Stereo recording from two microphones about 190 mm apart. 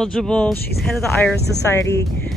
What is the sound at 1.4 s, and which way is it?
Speech, 60° left (ahead or behind).